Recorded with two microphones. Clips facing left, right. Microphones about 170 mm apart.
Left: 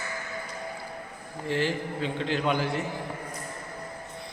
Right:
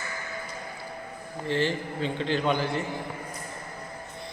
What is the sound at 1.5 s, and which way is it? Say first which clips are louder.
A man's voice: right 1 dB; 5° left (ahead or behind).